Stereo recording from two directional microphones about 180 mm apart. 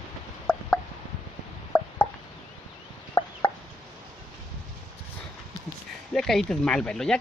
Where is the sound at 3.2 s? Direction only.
25° left (ahead or behind).